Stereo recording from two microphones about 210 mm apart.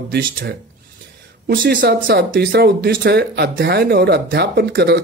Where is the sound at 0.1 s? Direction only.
50° right (ahead or behind).